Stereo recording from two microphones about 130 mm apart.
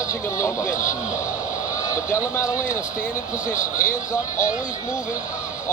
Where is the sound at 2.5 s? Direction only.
75° left (ahead or behind).